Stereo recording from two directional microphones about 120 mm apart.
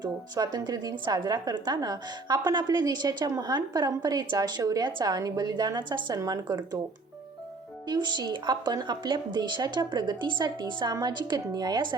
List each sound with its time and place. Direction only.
0.0 s a woman's voice: 35° right (ahead or behind)
7.9 s a woman's voice: 35° right (ahead or behind)